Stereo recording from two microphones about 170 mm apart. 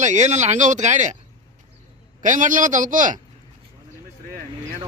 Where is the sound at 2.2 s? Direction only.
50° right (ahead or behind).